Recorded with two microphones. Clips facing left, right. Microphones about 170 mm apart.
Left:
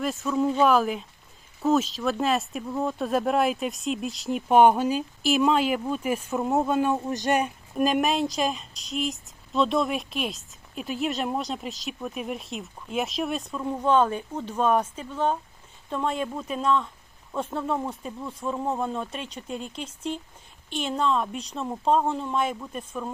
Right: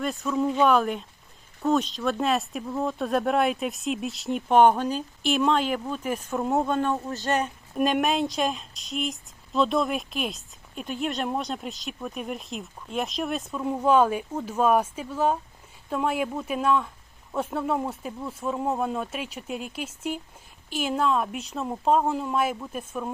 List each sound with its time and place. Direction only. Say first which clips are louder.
0.0 s a woman's voice: left 1 dB; centre (ahead or behind)
7.8 s a woman's voice: even; centre (ahead or behind)